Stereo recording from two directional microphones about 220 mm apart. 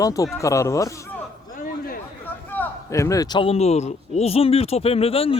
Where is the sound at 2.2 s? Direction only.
10° left (ahead or behind); by 5.3 s 25° left (ahead or behind).